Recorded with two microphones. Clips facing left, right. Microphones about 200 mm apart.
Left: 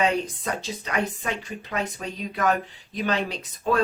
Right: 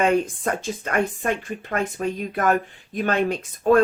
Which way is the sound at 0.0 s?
50° right (ahead or behind).